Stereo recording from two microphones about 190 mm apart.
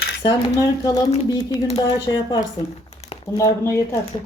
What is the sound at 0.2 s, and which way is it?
Speech, 25° left (ahead or behind).